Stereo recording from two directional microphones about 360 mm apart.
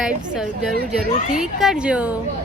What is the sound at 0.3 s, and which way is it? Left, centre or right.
A woman's voice, centre.